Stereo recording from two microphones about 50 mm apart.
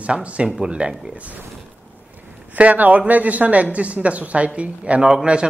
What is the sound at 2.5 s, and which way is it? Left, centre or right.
Speech, right.